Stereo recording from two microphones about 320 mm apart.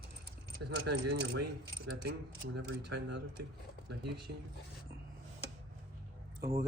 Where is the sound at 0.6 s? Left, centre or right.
Right.